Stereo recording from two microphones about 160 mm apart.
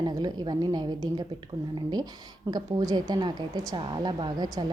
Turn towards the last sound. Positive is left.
turn(degrees=-25)  # may be behind; listen again after turning